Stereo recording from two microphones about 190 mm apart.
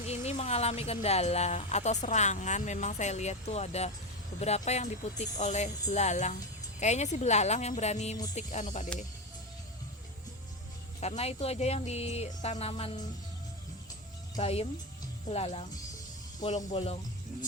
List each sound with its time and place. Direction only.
0.0 s speech: 35° left (ahead or behind)
11.0 s speech: 35° left (ahead or behind)
14.3 s speech: 30° left (ahead or behind)